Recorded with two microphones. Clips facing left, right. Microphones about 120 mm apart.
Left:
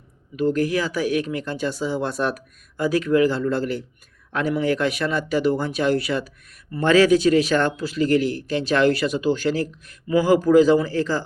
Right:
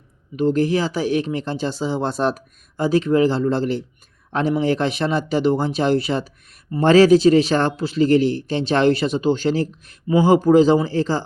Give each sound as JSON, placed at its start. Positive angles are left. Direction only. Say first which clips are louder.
{"t": 0.3, "sound": "a man's voice", "louder": "right 3 dB", "side_deg": -25}